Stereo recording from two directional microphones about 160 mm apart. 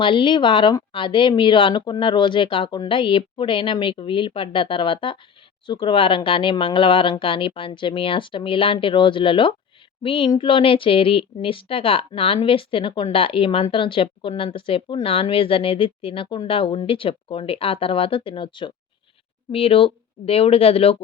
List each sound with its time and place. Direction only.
0.0 s a woman's voice: 30° left (ahead or behind)